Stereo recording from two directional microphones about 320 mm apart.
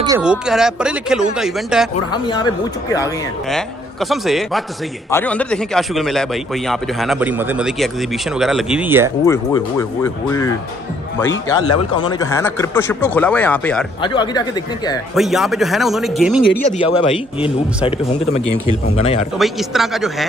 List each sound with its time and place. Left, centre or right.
0.0 s a man's voice: centre
2.1 s a man's voice: centre
9.2 s speech: centre
15.1 s a man's voice: centre
16.7 s speech: centre
19.3 s a man's voice: centre